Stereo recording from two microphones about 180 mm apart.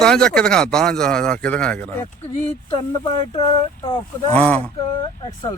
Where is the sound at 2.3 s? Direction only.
30° left (ahead or behind).